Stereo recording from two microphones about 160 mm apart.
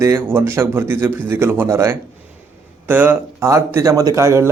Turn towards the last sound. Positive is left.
turn(degrees=-15)  # may be behind; listen again after turning